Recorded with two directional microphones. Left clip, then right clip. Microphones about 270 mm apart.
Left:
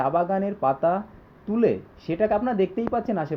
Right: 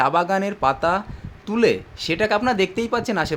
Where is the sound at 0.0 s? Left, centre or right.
Centre.